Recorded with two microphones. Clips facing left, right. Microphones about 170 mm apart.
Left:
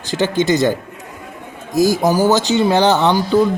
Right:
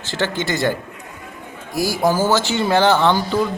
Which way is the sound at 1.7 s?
20° left (ahead or behind).